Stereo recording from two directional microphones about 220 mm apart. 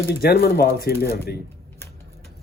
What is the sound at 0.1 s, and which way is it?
Speech, 45° left (ahead or behind).